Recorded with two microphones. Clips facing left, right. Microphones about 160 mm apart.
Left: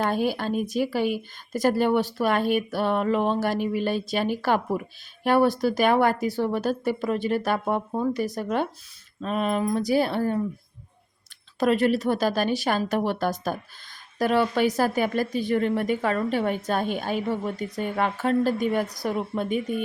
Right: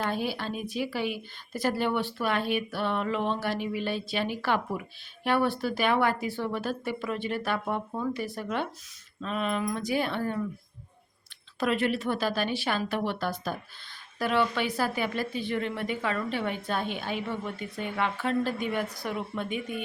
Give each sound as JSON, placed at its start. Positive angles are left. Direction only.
{"t": 0.0, "sound": "speech", "side_deg": 45}
{"t": 11.6, "sound": "speech", "side_deg": 40}